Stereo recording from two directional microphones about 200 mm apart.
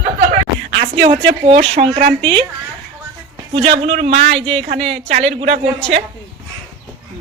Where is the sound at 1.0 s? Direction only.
25° right (ahead or behind).